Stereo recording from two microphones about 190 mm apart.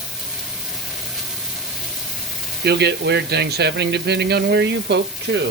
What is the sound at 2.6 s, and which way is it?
Speech, 60° right (ahead or behind).